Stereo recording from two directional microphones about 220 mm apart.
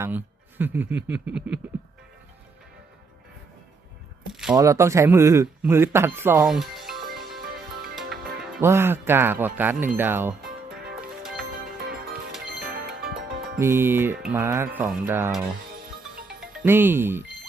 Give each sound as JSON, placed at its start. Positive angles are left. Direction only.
{"t": 0.6, "sound": "speech", "side_deg": -10}
{"t": 4.3, "sound": "a sound", "side_deg": 0}
{"t": 4.5, "sound": "speech", "side_deg": -15}
{"t": 8.6, "sound": "speech", "side_deg": -10}
{"t": 12.6, "sound": "music", "side_deg": -45}
{"t": 13.6, "sound": "speech", "side_deg": -10}
{"t": 16.2, "sound": "music", "side_deg": -5}